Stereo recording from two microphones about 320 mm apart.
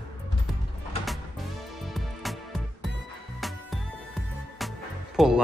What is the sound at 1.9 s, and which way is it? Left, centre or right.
Music, centre.